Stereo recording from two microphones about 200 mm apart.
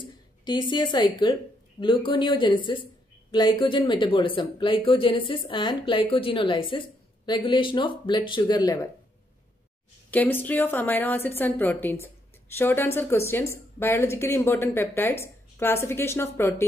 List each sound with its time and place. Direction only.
0.5 s a woman's voice: 20° left (ahead or behind)
10.1 s a woman's voice: 10° left (ahead or behind)